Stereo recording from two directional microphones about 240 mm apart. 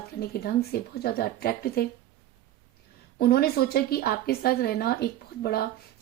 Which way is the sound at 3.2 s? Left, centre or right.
Left.